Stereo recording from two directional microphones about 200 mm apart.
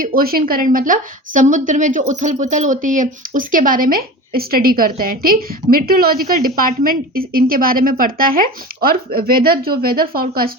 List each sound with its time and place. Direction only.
0.0 s a woman's voice: 50° right (ahead or behind)